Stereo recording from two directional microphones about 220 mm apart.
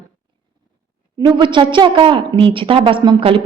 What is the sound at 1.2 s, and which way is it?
A woman's voice, 20° right (ahead or behind).